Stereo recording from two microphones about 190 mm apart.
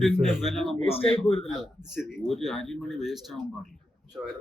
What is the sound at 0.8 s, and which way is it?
Speech, 30° left (ahead or behind).